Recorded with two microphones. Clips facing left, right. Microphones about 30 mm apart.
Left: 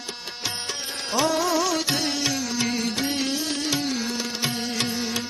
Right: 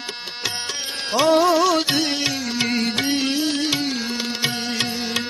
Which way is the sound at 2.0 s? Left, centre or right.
Right.